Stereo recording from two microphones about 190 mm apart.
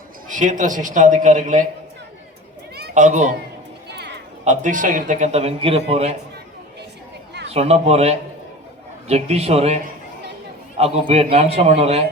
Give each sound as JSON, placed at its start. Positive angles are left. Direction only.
{"t": 0.3, "sound": "a man's voice", "side_deg": -40}
{"t": 2.9, "sound": "a child's voice", "side_deg": -40}
{"t": 3.8, "sound": "a sound", "side_deg": -60}
{"t": 4.4, "sound": "a man's voice", "side_deg": -40}
{"t": 7.5, "sound": "a man's voice", "side_deg": -35}